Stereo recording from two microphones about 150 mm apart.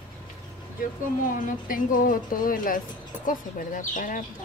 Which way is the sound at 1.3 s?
65° left (ahead or behind).